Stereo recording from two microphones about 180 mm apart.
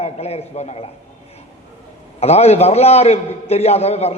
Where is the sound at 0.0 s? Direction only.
35° left (ahead or behind).